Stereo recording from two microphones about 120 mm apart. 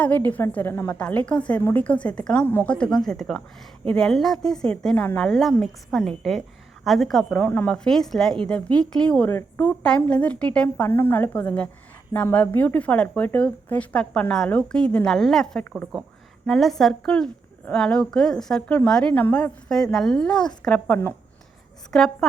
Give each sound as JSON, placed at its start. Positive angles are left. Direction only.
{"t": 0.3, "sound": "a woman's voice", "side_deg": 15}